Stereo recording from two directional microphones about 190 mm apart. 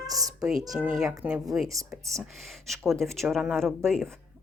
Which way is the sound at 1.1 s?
15° right (ahead or behind).